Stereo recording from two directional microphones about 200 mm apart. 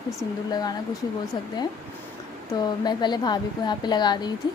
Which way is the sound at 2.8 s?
20° left (ahead or behind).